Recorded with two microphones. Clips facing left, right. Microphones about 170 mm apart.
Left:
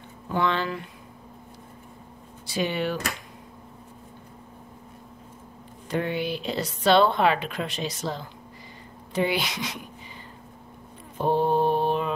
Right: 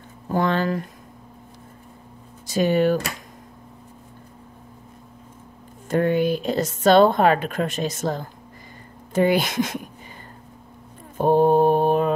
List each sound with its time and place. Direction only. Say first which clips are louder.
0.3 s a woman's voice: right 4 dB; 45° right (ahead or behind)
2.4 s a woman's voice: right 8 dB; 45° right (ahead or behind)
5.9 s a woman's voice: right 8 dB; 45° right (ahead or behind)
11.1 s mantra: right 6 dB; 45° right (ahead or behind)